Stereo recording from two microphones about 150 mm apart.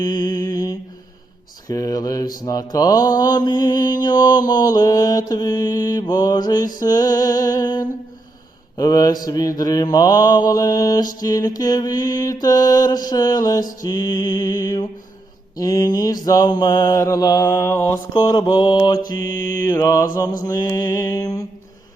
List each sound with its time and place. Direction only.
0.0 s mantra: 25° left (ahead or behind)
18.1 s mantra: 30° left (ahead or behind)
19.2 s mantra: 65° right (ahead or behind)
19.6 s mantra: 25° left (ahead or behind)